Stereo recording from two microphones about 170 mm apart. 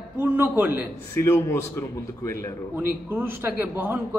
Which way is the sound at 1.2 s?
15° left (ahead or behind).